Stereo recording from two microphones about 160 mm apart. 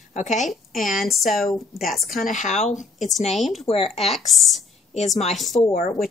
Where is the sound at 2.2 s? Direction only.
50° left (ahead or behind).